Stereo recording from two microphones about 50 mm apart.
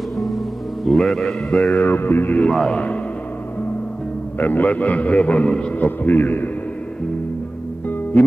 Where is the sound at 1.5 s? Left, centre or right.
Left.